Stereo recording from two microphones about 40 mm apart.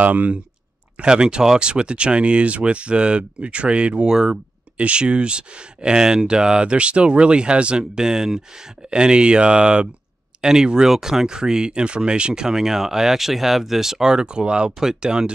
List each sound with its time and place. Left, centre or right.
0.0 s speech: right
0.9 s speech: right
4.7 s speech: right
12.4 s speech: centre
14.1 s speech: right